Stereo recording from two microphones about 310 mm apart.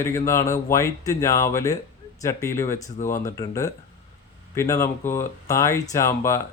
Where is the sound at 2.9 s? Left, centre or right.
Left.